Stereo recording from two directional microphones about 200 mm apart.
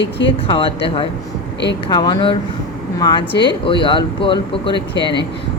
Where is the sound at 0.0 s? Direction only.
65° left (ahead or behind).